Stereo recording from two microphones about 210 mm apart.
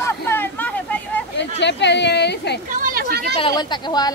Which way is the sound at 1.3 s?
55° left (ahead or behind).